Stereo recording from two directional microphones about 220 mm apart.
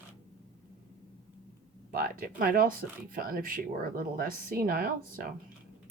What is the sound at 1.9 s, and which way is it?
Speech, 40° right (ahead or behind).